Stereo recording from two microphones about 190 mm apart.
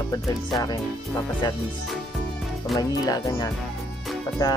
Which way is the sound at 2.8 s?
20° left (ahead or behind).